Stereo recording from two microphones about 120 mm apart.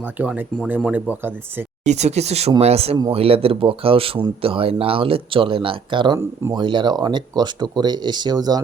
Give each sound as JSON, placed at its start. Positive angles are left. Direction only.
{"t": 0.0, "sound": "speech", "side_deg": -15}
{"t": 1.8, "sound": "speech", "side_deg": -70}